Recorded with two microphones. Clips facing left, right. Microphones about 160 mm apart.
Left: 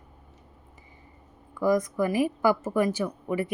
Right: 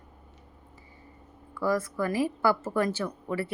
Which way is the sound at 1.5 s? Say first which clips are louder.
Left 4 dB; 15° left (ahead or behind).